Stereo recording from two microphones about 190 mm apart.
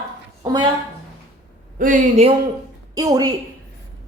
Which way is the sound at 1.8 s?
40° right (ahead or behind).